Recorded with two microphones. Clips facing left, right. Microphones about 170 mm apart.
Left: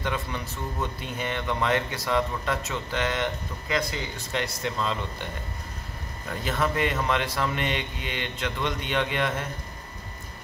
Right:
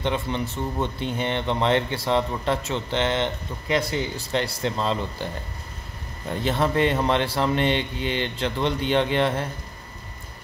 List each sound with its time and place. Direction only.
0.0 s a man's voice: 25° right (ahead or behind)